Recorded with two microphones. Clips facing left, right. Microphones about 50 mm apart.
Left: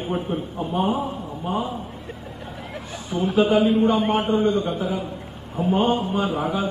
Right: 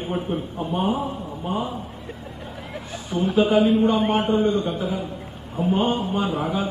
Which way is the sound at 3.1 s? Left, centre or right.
Centre.